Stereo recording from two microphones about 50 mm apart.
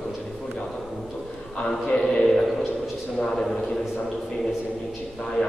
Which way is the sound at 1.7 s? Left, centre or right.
Centre.